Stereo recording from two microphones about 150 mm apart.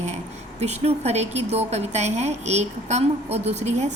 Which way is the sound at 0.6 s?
45° right (ahead or behind).